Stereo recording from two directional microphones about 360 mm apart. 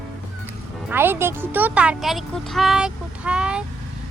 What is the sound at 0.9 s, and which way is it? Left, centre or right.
Speech, centre.